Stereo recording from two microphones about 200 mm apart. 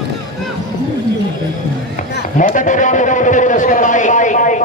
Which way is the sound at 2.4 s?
40° left (ahead or behind).